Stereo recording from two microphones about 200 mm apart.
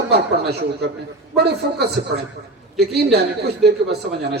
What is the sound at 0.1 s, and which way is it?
A man's voice, 55° right (ahead or behind).